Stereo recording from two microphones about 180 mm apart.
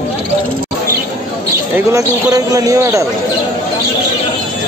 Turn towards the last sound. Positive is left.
turn(degrees=-15)  # may be behind; listen again after turning